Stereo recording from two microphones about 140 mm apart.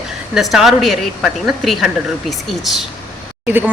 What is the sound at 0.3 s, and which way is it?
A woman's voice, centre (ahead or behind).